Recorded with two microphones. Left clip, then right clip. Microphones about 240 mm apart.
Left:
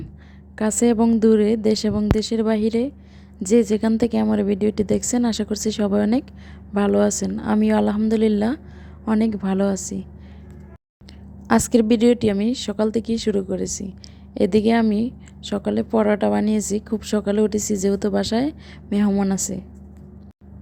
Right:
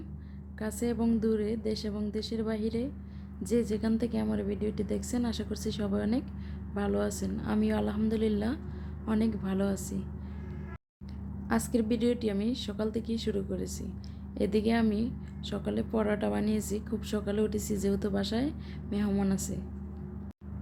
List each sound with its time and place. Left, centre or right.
0.6 s a woman's voice: left
11.4 s a woman's voice: left